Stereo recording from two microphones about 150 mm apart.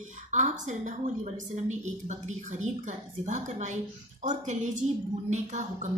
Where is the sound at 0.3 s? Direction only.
55° right (ahead or behind).